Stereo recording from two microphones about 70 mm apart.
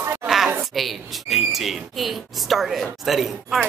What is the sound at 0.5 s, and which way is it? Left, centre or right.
Speech, centre.